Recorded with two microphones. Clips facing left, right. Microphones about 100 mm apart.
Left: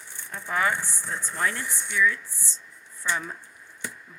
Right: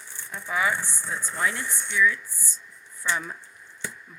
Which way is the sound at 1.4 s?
45° left (ahead or behind).